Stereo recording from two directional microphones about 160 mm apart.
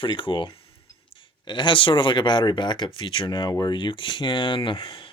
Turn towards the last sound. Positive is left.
turn(degrees=30)  # may be behind; listen again after turning